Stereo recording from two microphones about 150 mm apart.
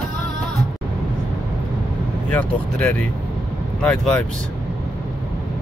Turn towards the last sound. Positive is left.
turn(degrees=5)  # may be behind; listen again after turning